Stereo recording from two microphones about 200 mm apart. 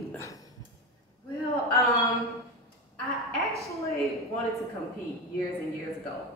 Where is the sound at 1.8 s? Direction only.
15° left (ahead or behind).